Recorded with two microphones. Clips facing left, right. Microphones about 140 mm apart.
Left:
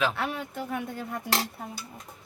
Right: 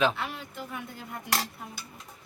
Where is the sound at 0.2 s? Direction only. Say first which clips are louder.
Left 5 dB; 55° left (ahead or behind).